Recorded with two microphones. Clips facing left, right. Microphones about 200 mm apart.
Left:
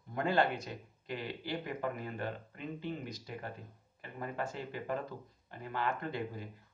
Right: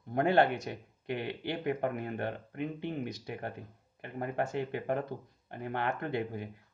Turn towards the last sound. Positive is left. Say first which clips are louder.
# right 4 dB
turn(degrees=-60)  # may be behind; listen again after turning